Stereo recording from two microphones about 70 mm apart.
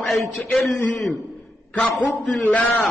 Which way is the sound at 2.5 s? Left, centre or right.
Left.